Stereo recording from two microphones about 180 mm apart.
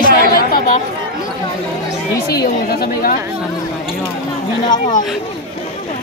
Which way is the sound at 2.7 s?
55° left (ahead or behind).